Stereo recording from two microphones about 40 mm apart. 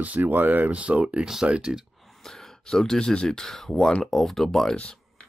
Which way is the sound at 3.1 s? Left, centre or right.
Centre.